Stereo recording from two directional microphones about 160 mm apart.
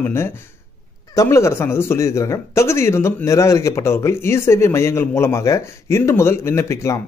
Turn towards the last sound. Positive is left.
turn(degrees=20)  # may be behind; listen again after turning